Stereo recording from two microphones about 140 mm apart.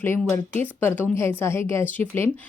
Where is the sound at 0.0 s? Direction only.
15° left (ahead or behind).